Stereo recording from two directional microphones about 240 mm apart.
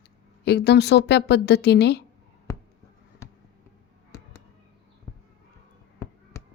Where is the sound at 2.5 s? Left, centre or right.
Centre.